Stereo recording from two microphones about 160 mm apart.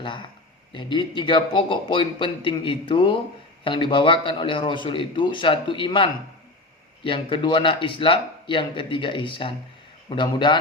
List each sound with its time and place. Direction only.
0.0 s a man's voice: 30° left (ahead or behind)